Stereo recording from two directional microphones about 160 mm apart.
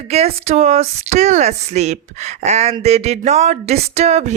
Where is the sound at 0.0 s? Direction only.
40° right (ahead or behind).